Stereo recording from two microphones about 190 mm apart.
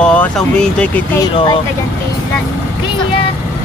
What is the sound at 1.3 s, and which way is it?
Speech, 25° left (ahead or behind).